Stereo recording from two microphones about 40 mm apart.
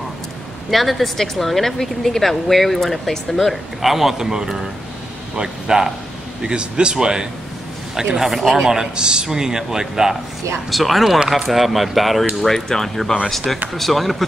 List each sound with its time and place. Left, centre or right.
0.7 s speech: centre
10.7 s speech: centre